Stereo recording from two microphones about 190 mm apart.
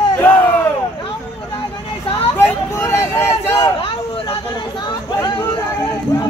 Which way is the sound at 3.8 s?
30° left (ahead or behind).